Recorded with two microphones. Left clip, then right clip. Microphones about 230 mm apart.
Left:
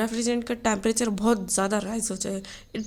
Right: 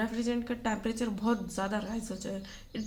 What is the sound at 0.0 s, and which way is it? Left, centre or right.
A woman's voice, left.